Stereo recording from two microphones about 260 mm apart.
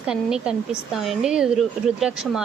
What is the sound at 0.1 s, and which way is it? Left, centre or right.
A woman's voice, centre.